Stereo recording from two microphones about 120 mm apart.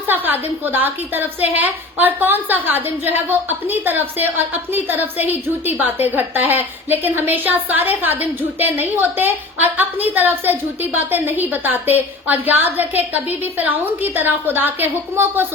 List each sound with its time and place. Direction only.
0.1 s a woman's voice: 15° right (ahead or behind)